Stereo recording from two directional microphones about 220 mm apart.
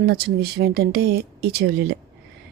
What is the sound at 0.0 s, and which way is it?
Speech, 45° right (ahead or behind).